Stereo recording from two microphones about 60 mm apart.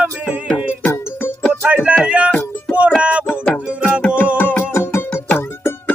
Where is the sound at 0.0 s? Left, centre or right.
Right.